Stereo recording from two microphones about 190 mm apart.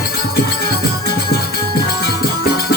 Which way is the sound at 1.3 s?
55° left (ahead or behind).